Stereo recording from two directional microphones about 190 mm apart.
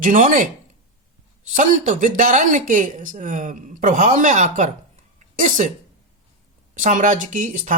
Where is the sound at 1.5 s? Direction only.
40° right (ahead or behind).